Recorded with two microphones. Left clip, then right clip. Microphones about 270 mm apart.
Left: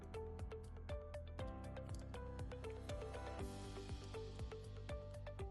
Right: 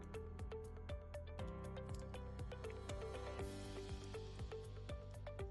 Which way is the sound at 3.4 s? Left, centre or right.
Centre.